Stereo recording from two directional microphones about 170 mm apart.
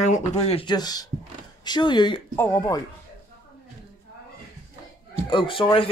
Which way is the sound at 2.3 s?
10° left (ahead or behind).